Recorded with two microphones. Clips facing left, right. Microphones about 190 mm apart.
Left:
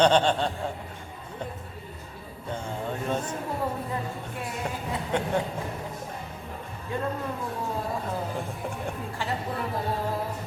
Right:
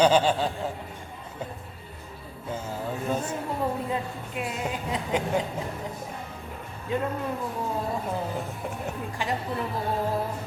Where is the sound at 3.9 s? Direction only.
20° right (ahead or behind).